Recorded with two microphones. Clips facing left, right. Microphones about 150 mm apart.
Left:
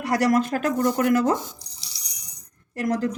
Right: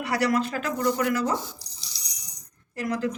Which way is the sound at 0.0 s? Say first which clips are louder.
Left 4 dB; 45° left (ahead or behind).